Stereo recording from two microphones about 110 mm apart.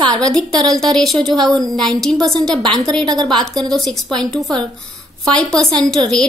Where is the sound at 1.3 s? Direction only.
40° right (ahead or behind).